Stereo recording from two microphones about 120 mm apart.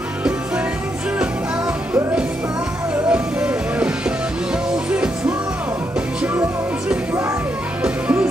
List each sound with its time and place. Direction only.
3.1 s music: 10° right (ahead or behind)
7.8 s music: 10° right (ahead or behind)